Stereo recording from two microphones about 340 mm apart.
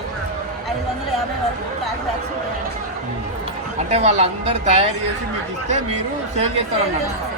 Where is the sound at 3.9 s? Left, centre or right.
Centre.